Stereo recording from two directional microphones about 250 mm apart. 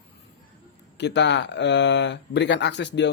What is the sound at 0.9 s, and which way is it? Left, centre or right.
Speech, left.